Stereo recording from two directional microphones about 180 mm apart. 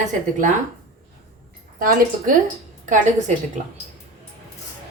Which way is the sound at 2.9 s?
40° right (ahead or behind).